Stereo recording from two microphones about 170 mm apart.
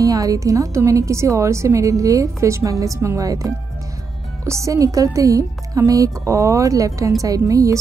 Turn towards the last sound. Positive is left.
turn(degrees=-20)  # may be behind; listen again after turning